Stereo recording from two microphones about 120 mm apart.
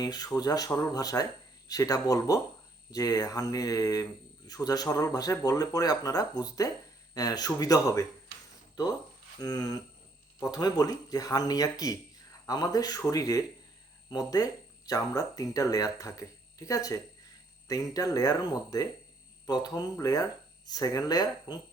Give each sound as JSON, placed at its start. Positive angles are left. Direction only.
{"t": 0.0, "sound": "speech", "side_deg": 30}